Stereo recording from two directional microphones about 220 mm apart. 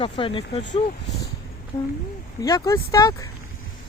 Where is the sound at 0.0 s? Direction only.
25° left (ahead or behind).